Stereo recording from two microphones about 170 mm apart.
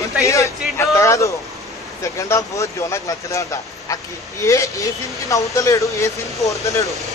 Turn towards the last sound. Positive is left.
turn(degrees=20)  # may be behind; listen again after turning